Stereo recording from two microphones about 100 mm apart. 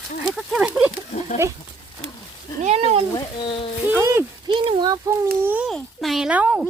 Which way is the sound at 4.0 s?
30° right (ahead or behind).